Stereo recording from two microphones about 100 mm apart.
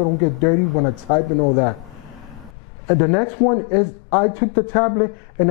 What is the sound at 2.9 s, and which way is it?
A woman's voice, 15° left (ahead or behind).